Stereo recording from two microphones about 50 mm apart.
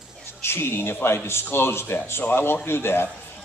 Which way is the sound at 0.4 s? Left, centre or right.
Left.